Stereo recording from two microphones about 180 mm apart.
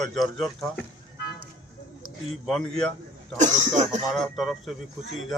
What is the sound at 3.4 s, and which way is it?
Speech, 45° right (ahead or behind).